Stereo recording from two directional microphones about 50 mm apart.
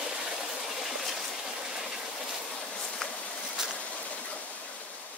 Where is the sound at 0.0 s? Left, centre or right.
Centre.